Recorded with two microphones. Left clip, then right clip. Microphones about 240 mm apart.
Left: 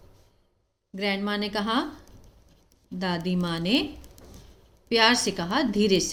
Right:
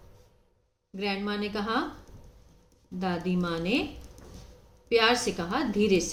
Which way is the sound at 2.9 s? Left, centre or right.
Left.